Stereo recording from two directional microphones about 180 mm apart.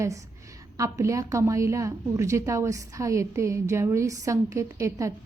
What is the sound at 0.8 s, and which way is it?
A woman's voice, 15° right (ahead or behind).